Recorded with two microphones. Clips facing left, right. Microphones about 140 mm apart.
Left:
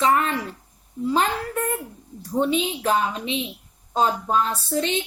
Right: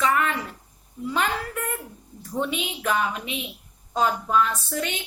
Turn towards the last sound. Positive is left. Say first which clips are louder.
# left 5 dB
turn(degrees=25)  # may be behind; listen again after turning